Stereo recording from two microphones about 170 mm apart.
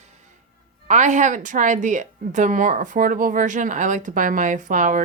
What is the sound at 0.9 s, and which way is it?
A woman's voice, 45° right (ahead or behind).